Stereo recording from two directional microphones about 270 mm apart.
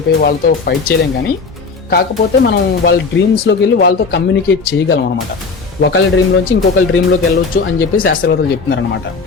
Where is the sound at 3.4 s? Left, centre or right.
Left.